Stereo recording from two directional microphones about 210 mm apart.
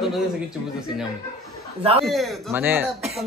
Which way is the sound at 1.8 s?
25° right (ahead or behind).